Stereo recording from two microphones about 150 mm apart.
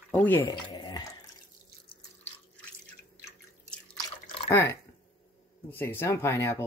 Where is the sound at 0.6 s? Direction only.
30° left (ahead or behind).